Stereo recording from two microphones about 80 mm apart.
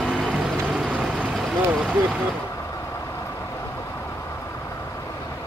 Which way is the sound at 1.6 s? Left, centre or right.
Centre.